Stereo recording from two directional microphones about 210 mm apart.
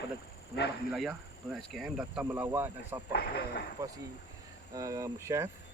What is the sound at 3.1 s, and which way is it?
Speech, 50° left (ahead or behind).